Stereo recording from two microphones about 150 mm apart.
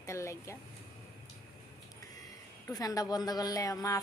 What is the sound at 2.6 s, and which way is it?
A woman's voice, 25° left (ahead or behind).